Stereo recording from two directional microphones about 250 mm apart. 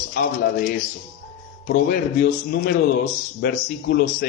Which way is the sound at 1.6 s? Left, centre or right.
Left.